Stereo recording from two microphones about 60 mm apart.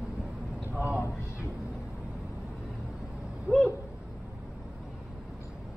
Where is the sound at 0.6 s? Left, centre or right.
Right.